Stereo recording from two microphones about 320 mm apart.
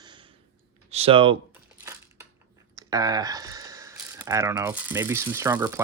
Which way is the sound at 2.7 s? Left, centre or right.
Centre.